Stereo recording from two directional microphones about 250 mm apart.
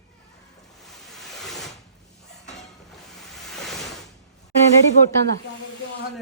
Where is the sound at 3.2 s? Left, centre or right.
Centre.